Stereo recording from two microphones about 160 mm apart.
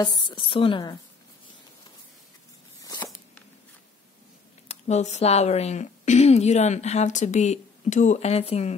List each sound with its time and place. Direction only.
0.0 s a woman's voice: 30° left (ahead or behind)
2.8 s a sound: 20° left (ahead or behind)
4.6 s a woman's voice: 45° left (ahead or behind)